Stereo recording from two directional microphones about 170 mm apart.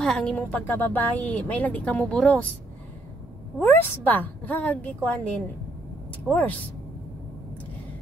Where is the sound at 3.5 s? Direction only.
10° left (ahead or behind).